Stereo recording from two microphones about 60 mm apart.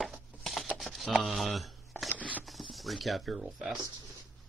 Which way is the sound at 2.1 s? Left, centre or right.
Left.